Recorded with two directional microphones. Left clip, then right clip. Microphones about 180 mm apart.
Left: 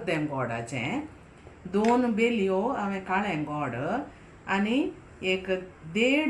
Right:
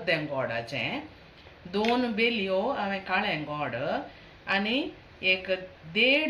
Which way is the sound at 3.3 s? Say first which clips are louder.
Even; 5° left (ahead or behind).